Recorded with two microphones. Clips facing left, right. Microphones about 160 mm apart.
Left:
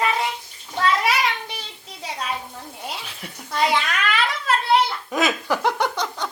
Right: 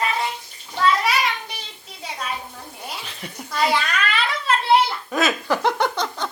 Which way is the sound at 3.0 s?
Centre (ahead or behind).